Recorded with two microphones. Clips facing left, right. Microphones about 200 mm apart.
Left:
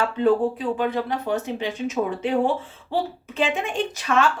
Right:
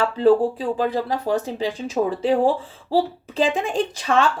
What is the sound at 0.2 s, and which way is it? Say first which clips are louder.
A woman's voice: right 4 dB; 35° right (ahead or behind).